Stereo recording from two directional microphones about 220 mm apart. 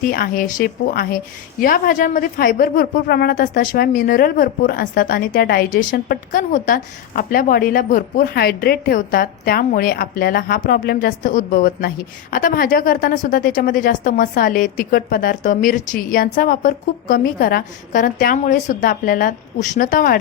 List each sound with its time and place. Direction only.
0.0 s a woman's voice: 40° left (ahead or behind)